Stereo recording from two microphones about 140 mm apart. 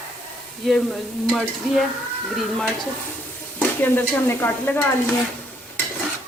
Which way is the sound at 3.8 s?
15° left (ahead or behind).